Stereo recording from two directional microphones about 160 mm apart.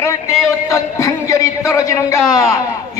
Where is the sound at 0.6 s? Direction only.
20° left (ahead or behind).